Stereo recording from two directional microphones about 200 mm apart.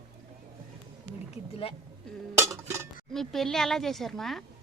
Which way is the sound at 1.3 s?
30° left (ahead or behind).